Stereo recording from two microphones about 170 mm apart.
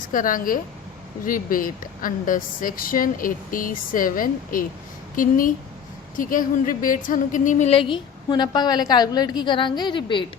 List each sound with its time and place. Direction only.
0.0 s a woman's voice: 50° left (ahead or behind); by 10.2 s 30° left (ahead or behind)